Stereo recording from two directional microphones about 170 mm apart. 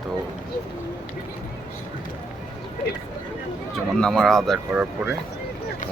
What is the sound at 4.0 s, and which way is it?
Speech, centre (ahead or behind).